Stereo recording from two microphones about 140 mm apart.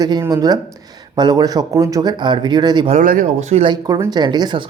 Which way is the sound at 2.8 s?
70° right (ahead or behind).